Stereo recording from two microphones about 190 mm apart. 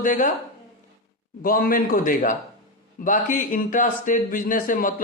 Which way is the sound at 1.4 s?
50° left (ahead or behind).